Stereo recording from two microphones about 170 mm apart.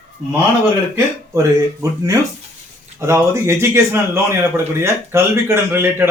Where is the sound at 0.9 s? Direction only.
15° right (ahead or behind).